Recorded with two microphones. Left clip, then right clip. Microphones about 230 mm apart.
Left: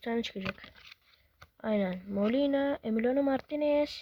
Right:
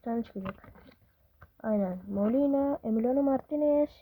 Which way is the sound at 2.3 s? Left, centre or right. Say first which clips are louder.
Right 2 dB; left.